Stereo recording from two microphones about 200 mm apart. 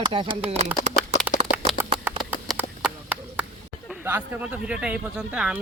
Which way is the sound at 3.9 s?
10° right (ahead or behind).